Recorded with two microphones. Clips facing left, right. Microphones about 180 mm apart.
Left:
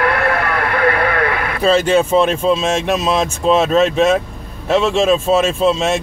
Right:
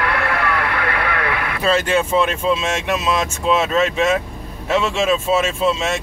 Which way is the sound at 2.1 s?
30° left (ahead or behind).